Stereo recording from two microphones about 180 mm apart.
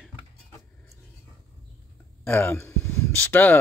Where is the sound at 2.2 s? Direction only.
10° left (ahead or behind).